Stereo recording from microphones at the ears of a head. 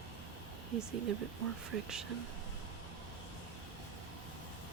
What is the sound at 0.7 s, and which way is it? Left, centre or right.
Speech, right.